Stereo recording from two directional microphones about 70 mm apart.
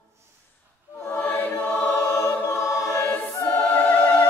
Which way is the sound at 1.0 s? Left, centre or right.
Left.